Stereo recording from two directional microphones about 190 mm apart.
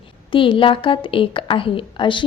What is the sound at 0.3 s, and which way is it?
A woman's voice, 25° left (ahead or behind).